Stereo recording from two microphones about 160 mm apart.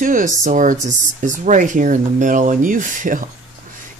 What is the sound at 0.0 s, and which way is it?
Speech, 55° right (ahead or behind).